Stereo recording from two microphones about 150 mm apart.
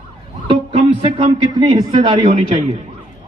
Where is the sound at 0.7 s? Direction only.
40° right (ahead or behind).